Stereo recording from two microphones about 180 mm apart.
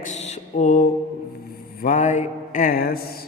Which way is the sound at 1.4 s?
50° left (ahead or behind).